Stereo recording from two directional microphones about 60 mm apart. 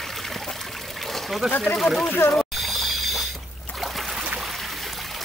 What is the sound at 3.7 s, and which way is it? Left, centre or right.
Boat, centre.